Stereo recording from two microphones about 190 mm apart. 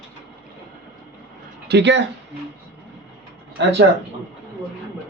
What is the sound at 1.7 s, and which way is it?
Speech, 65° right (ahead or behind).